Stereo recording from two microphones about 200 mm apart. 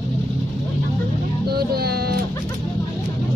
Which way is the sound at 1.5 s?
50° right (ahead or behind).